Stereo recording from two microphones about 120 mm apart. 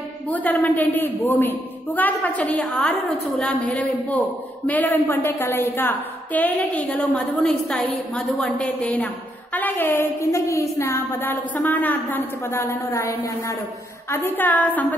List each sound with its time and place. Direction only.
0.3 s a woman's voice: 15° left (ahead or behind)